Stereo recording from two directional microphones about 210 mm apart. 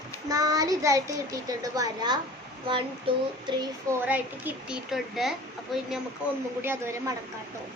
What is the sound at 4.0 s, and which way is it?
A woman's voice, 10° right (ahead or behind).